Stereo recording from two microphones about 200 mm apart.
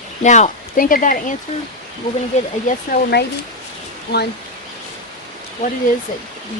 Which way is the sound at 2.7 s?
50° left (ahead or behind).